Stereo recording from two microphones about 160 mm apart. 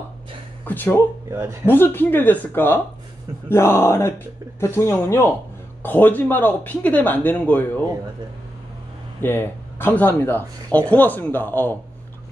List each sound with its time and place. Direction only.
0.7 s speech: 15° left (ahead or behind)
1.3 s speech: 15° right (ahead or behind)
1.7 s speech: 15° left (ahead or behind)
9.2 s speech: 15° left (ahead or behind)